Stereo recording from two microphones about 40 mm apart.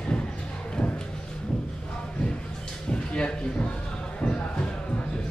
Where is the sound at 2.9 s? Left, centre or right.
Left.